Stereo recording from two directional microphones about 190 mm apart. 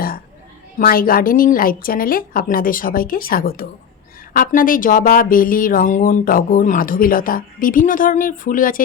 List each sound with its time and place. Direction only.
0.8 s speech: 50° left (ahead or behind)